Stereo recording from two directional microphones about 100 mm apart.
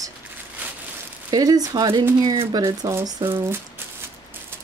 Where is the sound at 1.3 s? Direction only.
40° right (ahead or behind).